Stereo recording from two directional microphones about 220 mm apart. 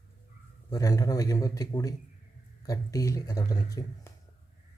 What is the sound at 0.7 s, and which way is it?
Speech, 15° left (ahead or behind).